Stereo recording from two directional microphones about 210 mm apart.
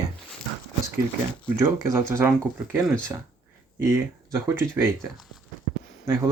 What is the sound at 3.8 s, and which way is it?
Speech, 15° right (ahead or behind).